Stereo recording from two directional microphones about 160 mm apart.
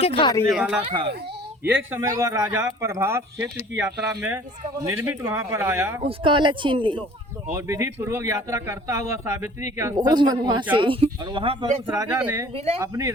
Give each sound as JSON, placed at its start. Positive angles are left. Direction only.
{"t": 0.0, "sound": "speech", "side_deg": 35}
{"t": 0.5, "sound": "speech", "side_deg": -5}
{"t": 1.7, "sound": "speech", "side_deg": -15}
{"t": 6.1, "sound": "speech", "side_deg": -30}
{"t": 8.3, "sound": "speech", "side_deg": -20}
{"t": 11.9, "sound": "speech", "side_deg": -10}
{"t": 12.5, "sound": "speech", "side_deg": -40}
{"t": 12.8, "sound": "speech", "side_deg": -20}